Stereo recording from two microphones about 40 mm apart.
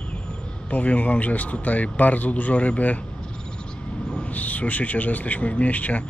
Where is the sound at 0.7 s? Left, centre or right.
Left.